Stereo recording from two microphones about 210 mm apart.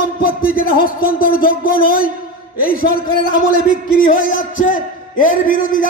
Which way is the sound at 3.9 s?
40° left (ahead or behind).